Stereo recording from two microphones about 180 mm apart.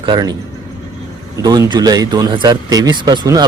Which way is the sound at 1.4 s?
20° right (ahead or behind).